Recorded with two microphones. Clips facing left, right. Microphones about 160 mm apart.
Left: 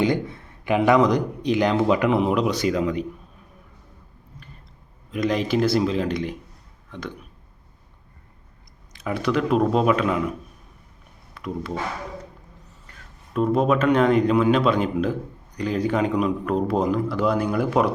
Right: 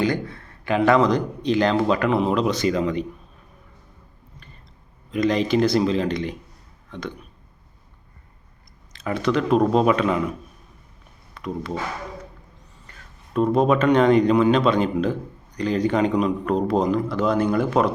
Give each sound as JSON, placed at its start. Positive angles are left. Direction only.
{"t": 0.0, "sound": "a man's voice", "side_deg": 20}
{"t": 5.1, "sound": "speech", "side_deg": 5}
{"t": 8.9, "sound": "speech", "side_deg": 5}
{"t": 11.3, "sound": "speech", "side_deg": 5}
{"t": 13.3, "sound": "a man's voice", "side_deg": 5}